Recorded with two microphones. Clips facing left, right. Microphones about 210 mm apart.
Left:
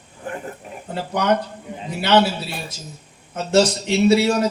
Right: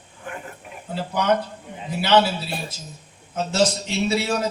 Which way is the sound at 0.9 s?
60° left (ahead or behind).